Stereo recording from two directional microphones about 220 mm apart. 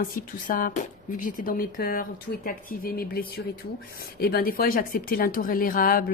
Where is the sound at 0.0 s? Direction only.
40° left (ahead or behind).